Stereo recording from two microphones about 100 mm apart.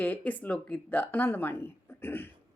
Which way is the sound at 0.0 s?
15° left (ahead or behind).